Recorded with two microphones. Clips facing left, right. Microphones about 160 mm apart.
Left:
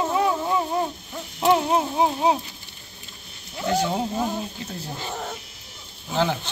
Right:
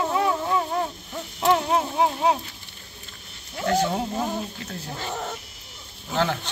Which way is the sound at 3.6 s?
10° left (ahead or behind).